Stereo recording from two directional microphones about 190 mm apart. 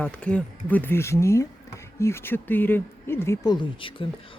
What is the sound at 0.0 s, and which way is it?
Speech, 5° left (ahead or behind).